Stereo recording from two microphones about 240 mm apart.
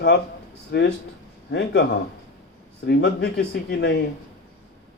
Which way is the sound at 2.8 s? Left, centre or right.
Left.